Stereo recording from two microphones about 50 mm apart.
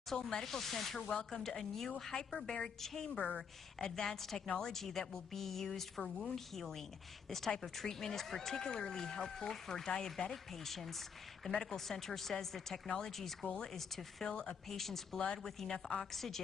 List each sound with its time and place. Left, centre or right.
0.1 s a woman's voice: centre
15.1 s a woman's voice: centre
15.4 s speech: centre